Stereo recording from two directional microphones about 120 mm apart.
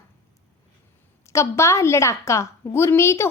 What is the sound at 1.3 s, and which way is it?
A woman's voice, 25° left (ahead or behind).